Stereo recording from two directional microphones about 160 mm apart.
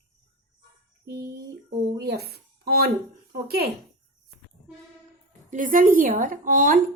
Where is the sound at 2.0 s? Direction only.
85° right.